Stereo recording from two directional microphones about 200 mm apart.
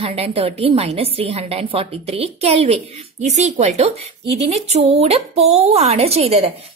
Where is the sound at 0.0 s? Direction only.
30° right (ahead or behind).